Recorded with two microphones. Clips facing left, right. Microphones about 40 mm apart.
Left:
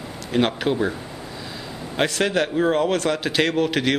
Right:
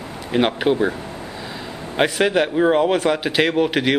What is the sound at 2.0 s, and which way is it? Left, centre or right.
A man's voice, centre.